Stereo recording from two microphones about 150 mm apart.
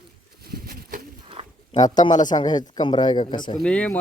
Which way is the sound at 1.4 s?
40° right (ahead or behind).